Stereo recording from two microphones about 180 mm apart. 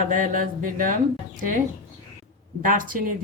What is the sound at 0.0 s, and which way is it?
Speech, 45° right (ahead or behind).